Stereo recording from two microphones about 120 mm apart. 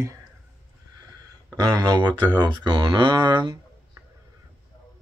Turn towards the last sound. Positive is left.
turn(degrees=-35)  # may be behind; listen again after turning